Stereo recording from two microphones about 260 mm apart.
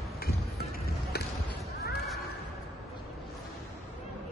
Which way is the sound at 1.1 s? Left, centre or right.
Left.